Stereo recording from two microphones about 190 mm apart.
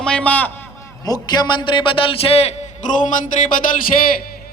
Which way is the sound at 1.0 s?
20° left (ahead or behind).